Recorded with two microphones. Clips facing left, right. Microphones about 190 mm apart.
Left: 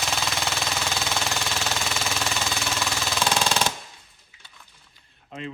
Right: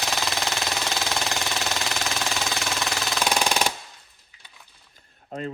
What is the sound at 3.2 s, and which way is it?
Machine gun, 15° right (ahead or behind).